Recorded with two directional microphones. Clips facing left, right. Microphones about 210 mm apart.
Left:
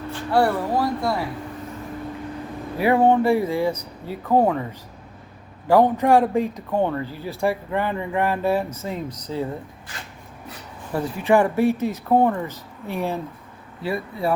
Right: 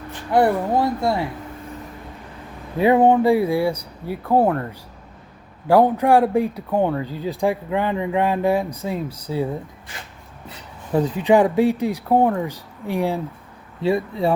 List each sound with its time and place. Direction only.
0.1 s speech: 20° right (ahead or behind)
2.7 s speech: 20° right (ahead or behind)
4.4 s speech: centre (ahead or behind)
5.6 s speech: 10° right (ahead or behind)
10.9 s speech: 20° right (ahead or behind)
13.8 s speech: 25° right (ahead or behind)